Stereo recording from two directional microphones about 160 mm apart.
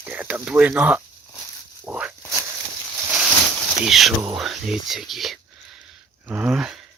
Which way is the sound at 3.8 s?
Centre (ahead or behind).